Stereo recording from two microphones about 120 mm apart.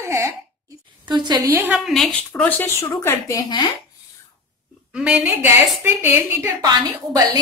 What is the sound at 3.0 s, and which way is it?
Speech, 30° left (ahead or behind).